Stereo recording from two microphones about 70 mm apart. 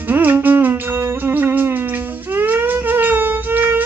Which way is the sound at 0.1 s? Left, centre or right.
Right.